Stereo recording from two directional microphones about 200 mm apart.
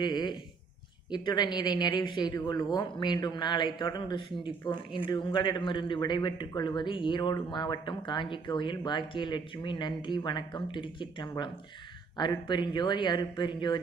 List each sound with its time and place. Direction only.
0.0 s a man's voice: 20° left (ahead or behind)